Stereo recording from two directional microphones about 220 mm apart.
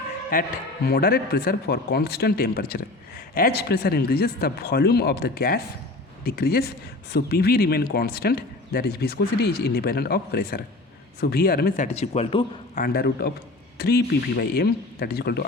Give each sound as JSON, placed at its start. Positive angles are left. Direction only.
{"t": 0.9, "sound": "speech", "side_deg": 45}
{"t": 11.9, "sound": "speech", "side_deg": 30}
{"t": 12.8, "sound": "speech", "side_deg": 45}